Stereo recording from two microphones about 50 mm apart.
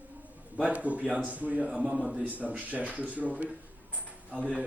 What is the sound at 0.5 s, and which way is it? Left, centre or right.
A man's voice, right.